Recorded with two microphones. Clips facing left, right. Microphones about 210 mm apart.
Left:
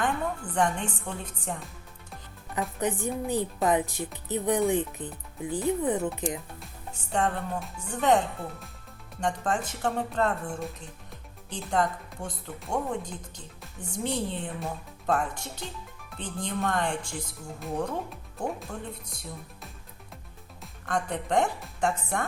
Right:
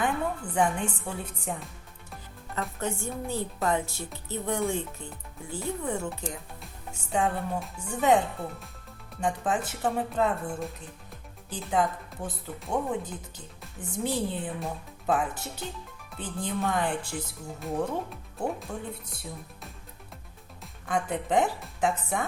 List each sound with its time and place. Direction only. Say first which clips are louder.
0.5 s speech: right 1 dB; 10° right (ahead or behind)
2.6 s speech: left 3 dB; 15° left (ahead or behind)
6.6 s speech: even; 5° right (ahead or behind)
9.2 s speech: even; 5° right (ahead or behind)
20.6 s speech: right 1 dB; 5° right (ahead or behind)